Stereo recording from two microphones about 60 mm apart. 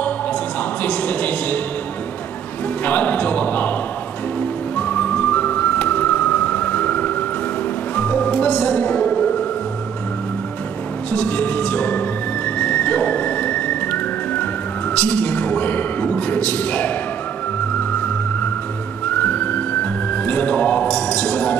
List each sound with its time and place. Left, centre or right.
0.8 s a man's voice: left
2.8 s a man's voice: left
4.7 s a sound: left
7.9 s music: left
11.1 s music: left
12.5 s whistle: left
15.0 s a sound: left
19.4 s music: left
20.9 s a sound: centre